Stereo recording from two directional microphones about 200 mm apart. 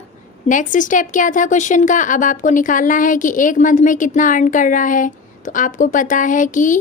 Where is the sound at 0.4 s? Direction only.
40° left (ahead or behind).